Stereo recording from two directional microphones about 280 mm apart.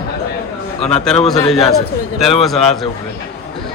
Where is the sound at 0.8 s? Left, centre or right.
Centre.